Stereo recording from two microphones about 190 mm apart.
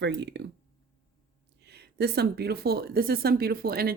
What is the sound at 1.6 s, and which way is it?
Speech, 60° right (ahead or behind).